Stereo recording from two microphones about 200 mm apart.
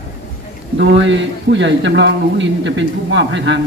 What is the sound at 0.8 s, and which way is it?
Speech, 65° right (ahead or behind).